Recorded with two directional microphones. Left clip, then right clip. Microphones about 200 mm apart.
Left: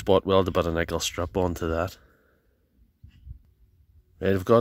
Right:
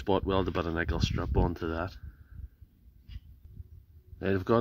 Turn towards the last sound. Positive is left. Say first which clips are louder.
# left 6 dB
turn(degrees=45)  # may be behind; listen again after turning